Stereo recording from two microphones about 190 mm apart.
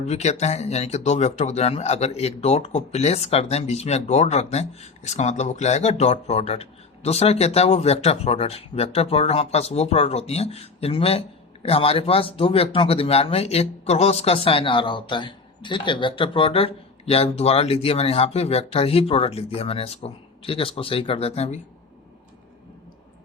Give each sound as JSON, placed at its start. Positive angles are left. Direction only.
{"t": 0.1, "sound": "speech", "side_deg": 35}